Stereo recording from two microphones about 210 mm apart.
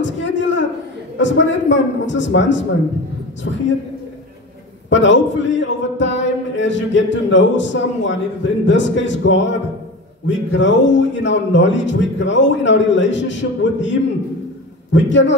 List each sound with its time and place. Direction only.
0.0 s a sound: 60° left (ahead or behind)
1.1 s a man's voice: 60° left (ahead or behind)
4.8 s a man's voice: 60° left (ahead or behind)